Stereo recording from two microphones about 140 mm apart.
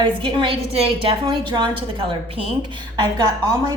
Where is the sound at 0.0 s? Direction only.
35° right (ahead or behind).